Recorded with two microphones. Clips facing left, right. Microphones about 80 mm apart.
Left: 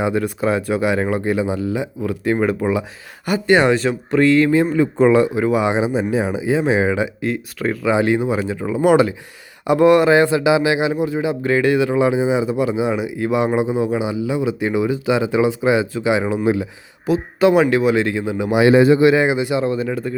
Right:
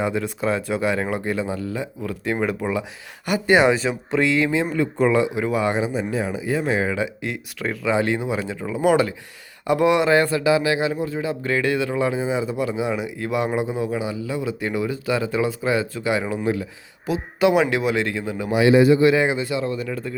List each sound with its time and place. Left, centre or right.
0.0 s speech: centre
3.4 s speech: centre
4.9 s speech: left
5.2 s speech: centre
7.2 s speech: centre
17.1 s speech: centre
18.6 s a man's voice: left
18.9 s speech: centre
19.5 s speech: left